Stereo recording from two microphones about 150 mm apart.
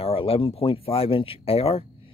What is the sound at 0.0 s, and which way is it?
Speech, 40° left (ahead or behind).